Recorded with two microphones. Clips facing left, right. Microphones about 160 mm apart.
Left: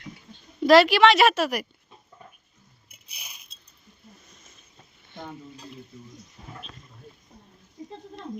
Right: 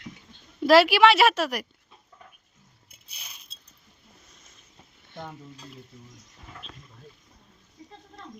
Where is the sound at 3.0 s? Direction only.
10° left (ahead or behind).